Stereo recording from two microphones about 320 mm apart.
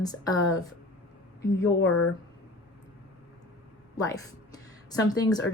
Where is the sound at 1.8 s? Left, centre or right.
Left.